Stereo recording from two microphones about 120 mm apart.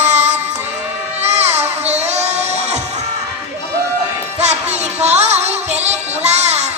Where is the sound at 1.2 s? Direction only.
65° right (ahead or behind).